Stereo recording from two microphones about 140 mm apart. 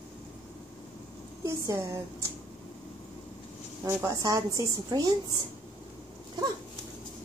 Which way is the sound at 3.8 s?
25° right (ahead or behind).